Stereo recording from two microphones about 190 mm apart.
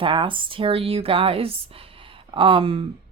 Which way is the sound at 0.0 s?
25° right (ahead or behind).